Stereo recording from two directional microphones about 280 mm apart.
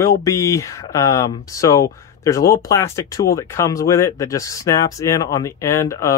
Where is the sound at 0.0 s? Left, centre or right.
Centre.